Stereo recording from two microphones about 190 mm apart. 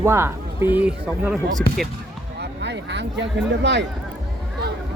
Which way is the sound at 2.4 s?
65° right (ahead or behind).